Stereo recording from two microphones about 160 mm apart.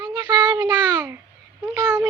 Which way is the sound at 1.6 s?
15° right (ahead or behind).